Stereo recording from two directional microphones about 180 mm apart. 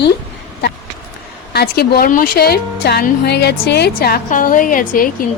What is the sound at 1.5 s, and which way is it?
A woman's voice, 60° left (ahead or behind).